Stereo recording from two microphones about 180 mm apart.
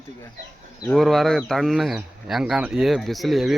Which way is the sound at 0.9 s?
Centre (ahead or behind).